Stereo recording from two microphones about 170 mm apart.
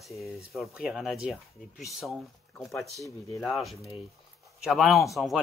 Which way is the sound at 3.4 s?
Centre (ahead or behind).